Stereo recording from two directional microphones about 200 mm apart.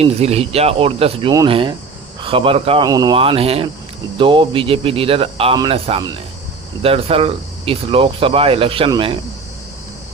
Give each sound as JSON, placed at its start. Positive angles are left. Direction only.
{"t": 0.0, "sound": "speech", "side_deg": -30}